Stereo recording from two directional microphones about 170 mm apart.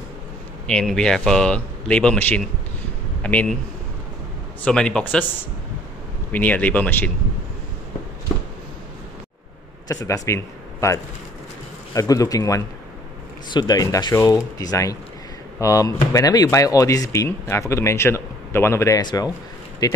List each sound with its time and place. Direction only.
0.7 s speech: 5° left (ahead or behind)
4.6 s speech: 5° left (ahead or behind)
6.3 s speech: 10° left (ahead or behind)
9.9 s speech: 15° left (ahead or behind)